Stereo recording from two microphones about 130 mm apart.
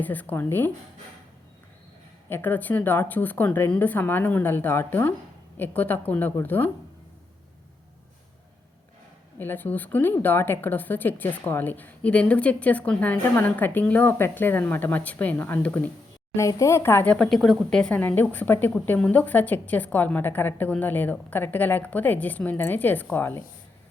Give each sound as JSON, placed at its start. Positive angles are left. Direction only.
{"t": 0.0, "sound": "speech", "side_deg": 15}
{"t": 2.3, "sound": "speech", "side_deg": 15}
{"t": 9.4, "sound": "speech", "side_deg": 15}
{"t": 16.3, "sound": "speech", "side_deg": 25}